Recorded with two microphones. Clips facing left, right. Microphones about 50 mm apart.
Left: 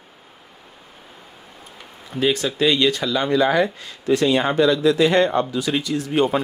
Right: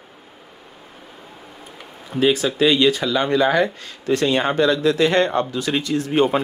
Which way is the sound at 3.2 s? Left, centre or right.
Right.